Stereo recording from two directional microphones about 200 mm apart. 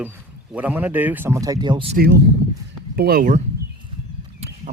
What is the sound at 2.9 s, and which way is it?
Speech, 50° right (ahead or behind).